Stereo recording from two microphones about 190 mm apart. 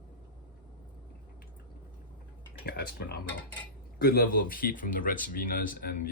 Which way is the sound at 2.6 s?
55° left (ahead or behind).